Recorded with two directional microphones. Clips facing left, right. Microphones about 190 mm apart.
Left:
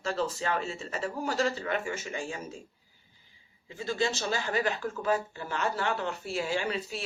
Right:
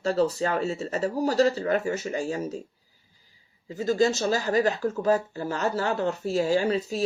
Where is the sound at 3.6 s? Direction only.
40° right (ahead or behind).